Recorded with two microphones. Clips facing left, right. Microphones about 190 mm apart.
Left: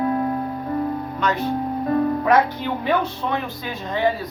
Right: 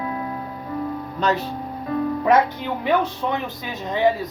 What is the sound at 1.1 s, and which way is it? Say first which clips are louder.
Speech: right 4 dB; 35° right (ahead or behind).